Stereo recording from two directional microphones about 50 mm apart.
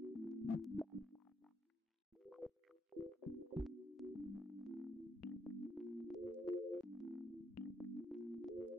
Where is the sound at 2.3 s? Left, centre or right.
Centre.